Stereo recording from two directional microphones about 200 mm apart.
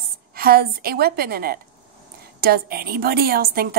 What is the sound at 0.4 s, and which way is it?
A woman's voice, 50° right (ahead or behind).